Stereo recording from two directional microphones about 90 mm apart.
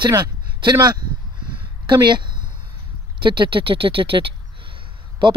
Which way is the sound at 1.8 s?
55° right (ahead or behind).